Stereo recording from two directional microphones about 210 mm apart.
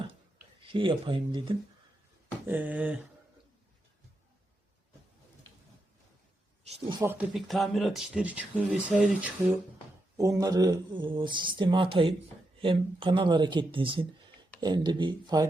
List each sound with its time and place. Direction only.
0.6 s speech: 25° right (ahead or behind)
2.5 s a sound: 5° right (ahead or behind)
6.8 s speech: 10° right (ahead or behind)